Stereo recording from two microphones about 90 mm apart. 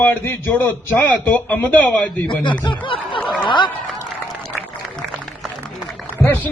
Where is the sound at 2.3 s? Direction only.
60° left (ahead or behind).